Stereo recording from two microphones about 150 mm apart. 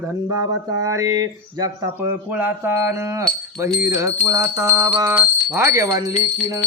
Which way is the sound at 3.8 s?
20° right (ahead or behind).